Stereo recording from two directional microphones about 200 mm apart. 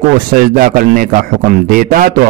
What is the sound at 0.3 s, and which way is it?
A man's voice, 45° right (ahead or behind).